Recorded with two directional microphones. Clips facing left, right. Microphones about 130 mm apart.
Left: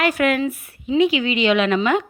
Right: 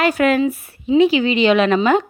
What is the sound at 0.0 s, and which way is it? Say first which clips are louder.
A woman's voice: right 3 dB; 30° right (ahead or behind).